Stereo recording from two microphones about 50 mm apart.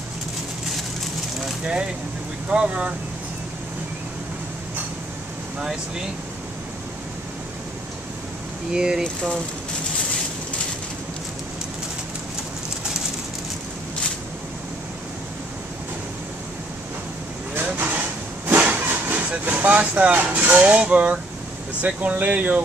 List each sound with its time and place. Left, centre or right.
2.5 s speech: centre
5.6 s speech: centre
8.7 s speech: centre
9.0 s speech: centre
17.6 s vehicle: right
21.8 s speech: right